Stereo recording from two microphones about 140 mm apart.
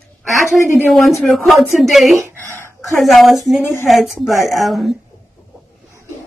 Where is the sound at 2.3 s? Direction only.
15° left (ahead or behind).